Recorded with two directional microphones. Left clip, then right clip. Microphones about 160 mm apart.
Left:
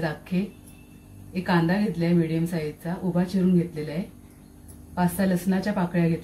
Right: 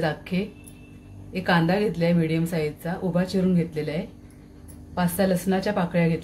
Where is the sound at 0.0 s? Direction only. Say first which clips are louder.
Right 3 dB; 30° right (ahead or behind).